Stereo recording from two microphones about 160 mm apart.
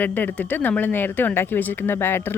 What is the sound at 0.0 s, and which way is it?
A woman's voice, 10° left (ahead or behind).